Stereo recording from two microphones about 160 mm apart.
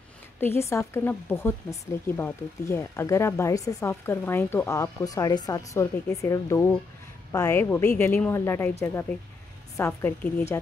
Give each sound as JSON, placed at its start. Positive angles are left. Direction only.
{"t": 0.4, "sound": "speech", "side_deg": 15}